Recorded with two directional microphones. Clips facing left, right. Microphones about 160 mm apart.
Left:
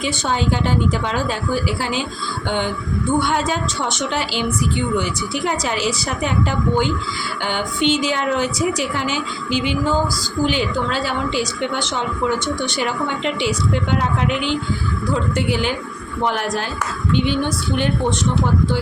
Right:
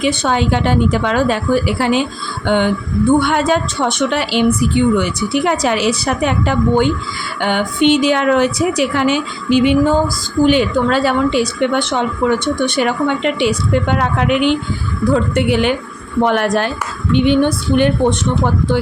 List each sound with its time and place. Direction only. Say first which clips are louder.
0.0 s a woman's voice: right 5 dB; 65° right (ahead or behind)